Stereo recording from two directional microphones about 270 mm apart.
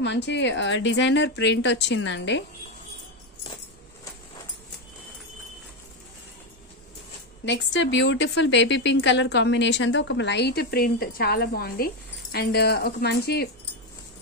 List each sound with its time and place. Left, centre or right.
0.0 s a woman's voice: left
7.4 s a woman's voice: left